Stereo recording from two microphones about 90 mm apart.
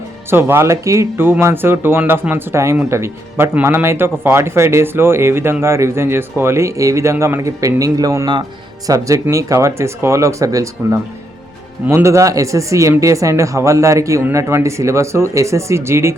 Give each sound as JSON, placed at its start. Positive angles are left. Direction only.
{"t": 0.3, "sound": "speech", "side_deg": -25}